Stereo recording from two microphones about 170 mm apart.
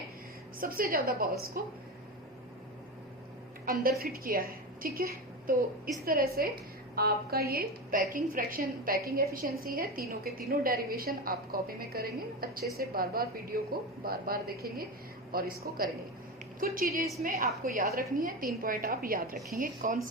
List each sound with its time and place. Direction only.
0.6 s a woman's voice: 60° right (ahead or behind)
3.7 s a woman's voice: 60° right (ahead or behind)